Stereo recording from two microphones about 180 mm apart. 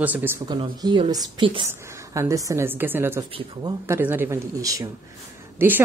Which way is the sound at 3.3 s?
30° right (ahead or behind).